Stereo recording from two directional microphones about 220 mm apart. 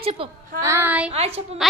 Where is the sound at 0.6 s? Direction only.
10° right (ahead or behind).